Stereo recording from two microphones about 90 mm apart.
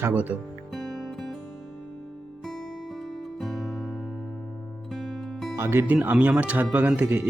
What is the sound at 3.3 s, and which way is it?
Music, centre (ahead or behind).